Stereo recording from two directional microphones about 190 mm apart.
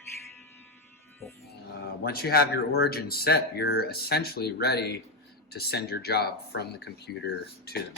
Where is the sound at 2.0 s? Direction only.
55° left (ahead or behind).